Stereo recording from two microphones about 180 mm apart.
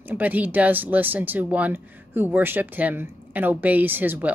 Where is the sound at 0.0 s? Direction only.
10° right (ahead or behind).